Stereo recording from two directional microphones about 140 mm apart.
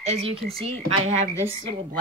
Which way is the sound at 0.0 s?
45° right (ahead or behind).